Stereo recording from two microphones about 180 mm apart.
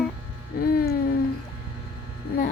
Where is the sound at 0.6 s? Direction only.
55° left (ahead or behind).